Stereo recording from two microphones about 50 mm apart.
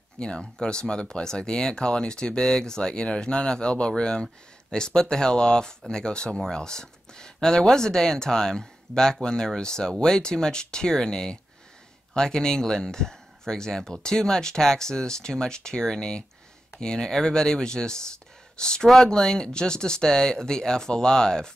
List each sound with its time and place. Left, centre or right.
0.2 s speech: centre